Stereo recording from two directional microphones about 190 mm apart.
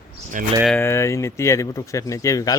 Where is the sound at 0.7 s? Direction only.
15° left (ahead or behind).